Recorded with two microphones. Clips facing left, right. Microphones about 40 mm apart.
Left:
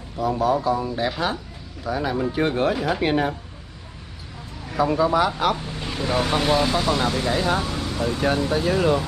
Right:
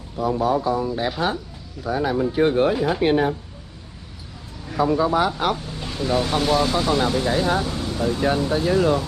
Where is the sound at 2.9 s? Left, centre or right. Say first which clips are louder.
Right 3 dB; left.